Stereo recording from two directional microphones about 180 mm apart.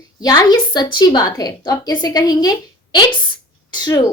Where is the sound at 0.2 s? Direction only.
20° left (ahead or behind).